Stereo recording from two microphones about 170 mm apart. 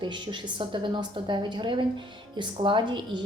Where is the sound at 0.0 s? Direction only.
30° right (ahead or behind).